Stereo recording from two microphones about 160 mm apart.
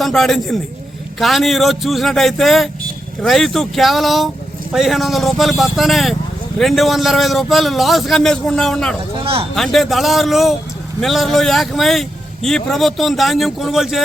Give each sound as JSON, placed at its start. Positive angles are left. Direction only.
{"t": 0.0, "sound": "a man's voice", "side_deg": 0}
{"t": 9.1, "sound": "speech", "side_deg": -35}
{"t": 9.6, "sound": "a man's voice", "side_deg": 0}